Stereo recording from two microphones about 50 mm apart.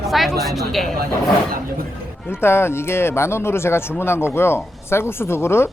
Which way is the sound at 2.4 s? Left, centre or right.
Left.